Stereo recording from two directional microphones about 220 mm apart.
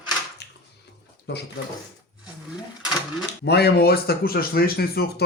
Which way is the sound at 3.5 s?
45° left (ahead or behind).